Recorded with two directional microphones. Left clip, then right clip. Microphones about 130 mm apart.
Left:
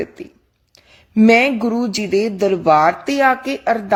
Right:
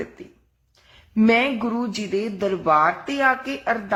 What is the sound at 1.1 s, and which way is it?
A woman's voice, 50° left (ahead or behind).